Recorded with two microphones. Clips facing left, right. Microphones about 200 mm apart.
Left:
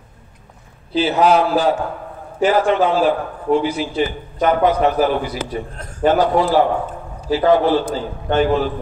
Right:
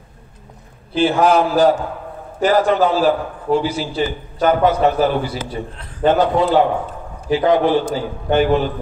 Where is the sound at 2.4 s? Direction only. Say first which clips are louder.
Right 1 dB; 40° right (ahead or behind).